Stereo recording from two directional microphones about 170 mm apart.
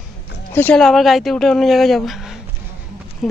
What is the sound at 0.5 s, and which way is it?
Speech, 10° left (ahead or behind).